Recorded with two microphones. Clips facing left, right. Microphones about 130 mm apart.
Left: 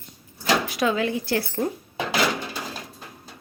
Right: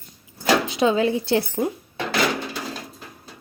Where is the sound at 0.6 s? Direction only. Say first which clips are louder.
Right 4 dB; 25° right (ahead or behind).